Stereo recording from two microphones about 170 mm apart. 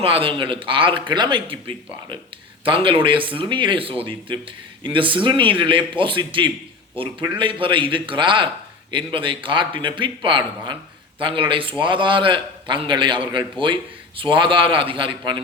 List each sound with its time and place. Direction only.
0.0 s a man's voice: 30° right (ahead or behind)